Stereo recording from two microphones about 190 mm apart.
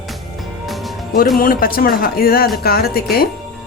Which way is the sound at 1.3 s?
50° left (ahead or behind).